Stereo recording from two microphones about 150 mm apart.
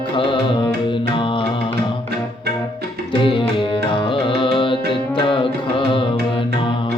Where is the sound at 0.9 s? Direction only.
35° left (ahead or behind).